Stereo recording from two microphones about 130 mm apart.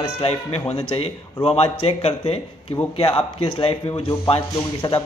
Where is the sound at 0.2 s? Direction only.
55° left (ahead or behind).